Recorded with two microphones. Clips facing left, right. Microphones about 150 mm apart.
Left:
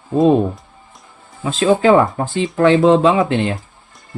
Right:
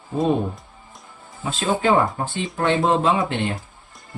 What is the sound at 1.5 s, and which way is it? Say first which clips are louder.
Speech: left 7 dB; 90° left.